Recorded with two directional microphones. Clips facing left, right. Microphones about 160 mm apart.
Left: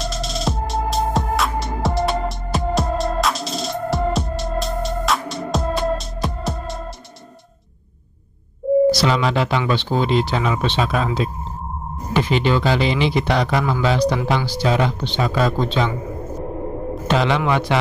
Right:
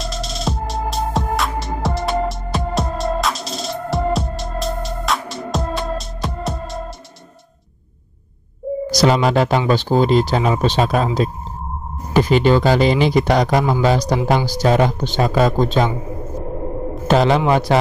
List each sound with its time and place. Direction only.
0.0 s music: centre (ahead or behind)
8.9 s speech: 40° right (ahead or behind)
12.1 s speech: 40° right (ahead or behind)
17.1 s speech: 40° right (ahead or behind)